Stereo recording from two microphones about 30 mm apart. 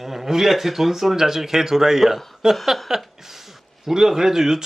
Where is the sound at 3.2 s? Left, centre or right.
Centre.